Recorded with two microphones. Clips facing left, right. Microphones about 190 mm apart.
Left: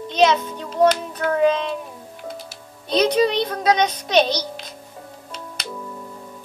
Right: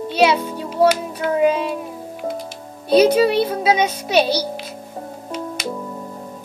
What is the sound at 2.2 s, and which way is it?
Music, 50° right (ahead or behind).